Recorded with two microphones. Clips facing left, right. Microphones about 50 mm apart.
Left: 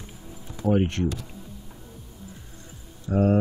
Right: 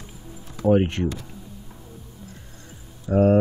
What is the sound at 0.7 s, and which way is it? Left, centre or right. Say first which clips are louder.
Speech: right 3 dB; centre.